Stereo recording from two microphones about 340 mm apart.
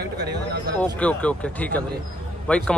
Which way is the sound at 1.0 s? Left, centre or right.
Centre.